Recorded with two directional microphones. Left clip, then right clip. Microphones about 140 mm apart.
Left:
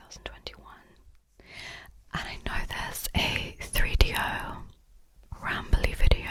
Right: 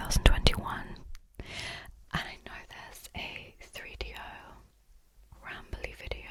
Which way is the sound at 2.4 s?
55° left (ahead or behind).